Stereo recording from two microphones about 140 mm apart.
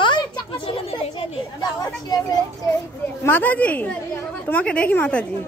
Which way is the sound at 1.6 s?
30° left (ahead or behind).